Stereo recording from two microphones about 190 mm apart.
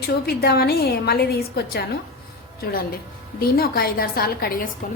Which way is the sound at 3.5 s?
55° left (ahead or behind).